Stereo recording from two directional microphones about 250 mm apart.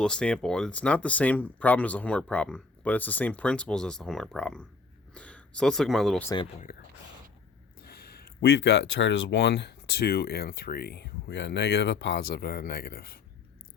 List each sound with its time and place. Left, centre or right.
0.0 s speech: centre
6.3 s speech: left
8.4 s speech: left